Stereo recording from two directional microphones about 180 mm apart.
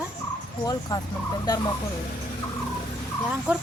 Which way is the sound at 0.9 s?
20° left (ahead or behind).